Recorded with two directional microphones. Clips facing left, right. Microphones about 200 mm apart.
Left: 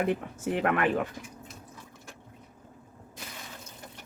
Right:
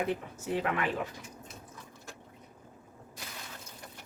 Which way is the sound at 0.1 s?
60° left (ahead or behind).